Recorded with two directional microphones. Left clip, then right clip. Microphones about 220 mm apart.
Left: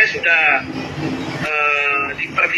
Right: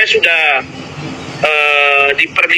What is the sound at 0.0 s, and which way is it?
Speech, 50° right (ahead or behind).